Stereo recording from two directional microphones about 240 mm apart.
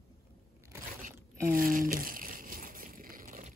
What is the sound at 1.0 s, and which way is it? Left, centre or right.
Crumpling, right.